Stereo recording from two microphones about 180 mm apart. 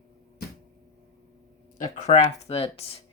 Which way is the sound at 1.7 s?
45° left (ahead or behind).